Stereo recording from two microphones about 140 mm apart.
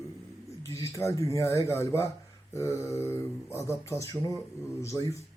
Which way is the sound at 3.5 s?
20° left (ahead or behind).